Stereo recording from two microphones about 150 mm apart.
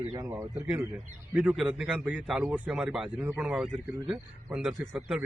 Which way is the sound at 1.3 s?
10° right (ahead or behind).